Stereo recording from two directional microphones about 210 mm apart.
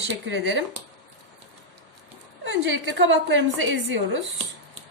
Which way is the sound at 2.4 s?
60° right (ahead or behind).